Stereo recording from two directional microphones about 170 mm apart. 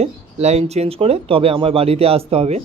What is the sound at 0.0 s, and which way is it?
Speech, 40° right (ahead or behind).